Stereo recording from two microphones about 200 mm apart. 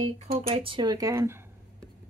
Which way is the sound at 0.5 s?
25° right (ahead or behind).